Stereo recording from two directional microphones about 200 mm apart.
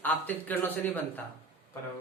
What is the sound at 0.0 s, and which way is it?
Speech, 10° left (ahead or behind).